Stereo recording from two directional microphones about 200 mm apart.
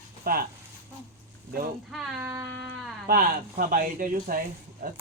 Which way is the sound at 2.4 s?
Centre (ahead or behind).